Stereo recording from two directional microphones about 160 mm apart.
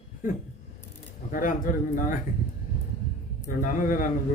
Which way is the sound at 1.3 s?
55° left (ahead or behind).